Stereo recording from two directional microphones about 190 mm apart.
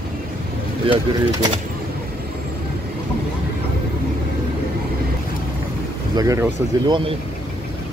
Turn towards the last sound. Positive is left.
turn(degrees=-15)  # may be behind; listen again after turning